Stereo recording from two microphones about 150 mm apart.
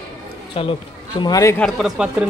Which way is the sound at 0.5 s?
40° left (ahead or behind).